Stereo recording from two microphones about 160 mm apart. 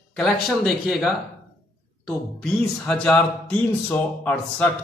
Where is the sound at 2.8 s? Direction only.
5° left (ahead or behind).